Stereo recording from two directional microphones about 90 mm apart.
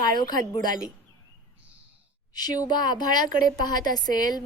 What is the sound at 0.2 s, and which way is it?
Speech, 55° left (ahead or behind).